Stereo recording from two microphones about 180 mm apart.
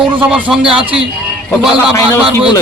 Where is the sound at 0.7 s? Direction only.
30° right (ahead or behind).